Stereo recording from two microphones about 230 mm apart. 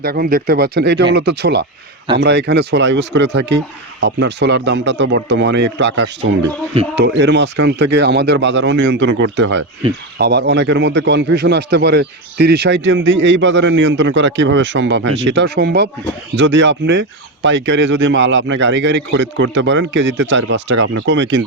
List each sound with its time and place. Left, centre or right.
0.0 s a man's voice: right